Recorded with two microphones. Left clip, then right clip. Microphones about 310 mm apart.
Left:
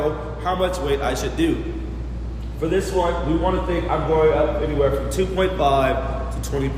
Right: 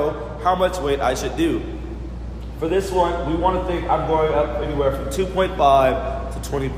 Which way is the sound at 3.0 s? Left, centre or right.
Centre.